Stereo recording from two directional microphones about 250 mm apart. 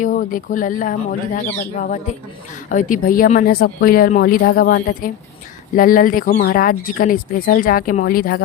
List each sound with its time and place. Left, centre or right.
0.0 s speech: left